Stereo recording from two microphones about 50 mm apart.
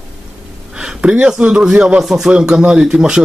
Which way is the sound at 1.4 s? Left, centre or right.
Centre.